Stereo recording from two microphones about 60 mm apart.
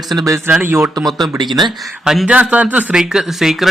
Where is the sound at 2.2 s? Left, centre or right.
Right.